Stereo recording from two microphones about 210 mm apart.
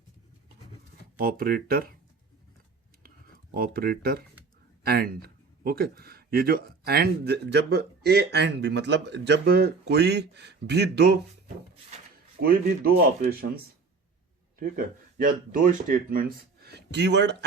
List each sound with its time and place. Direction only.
1.2 s speech: 45° right (ahead or behind)
3.0 s writing: 45° right (ahead or behind)
4.8 s speech: 45° right (ahead or behind)
11.4 s a sound: 30° right (ahead or behind)
12.4 s speech: 45° right (ahead or behind)
14.6 s speech: 40° right (ahead or behind)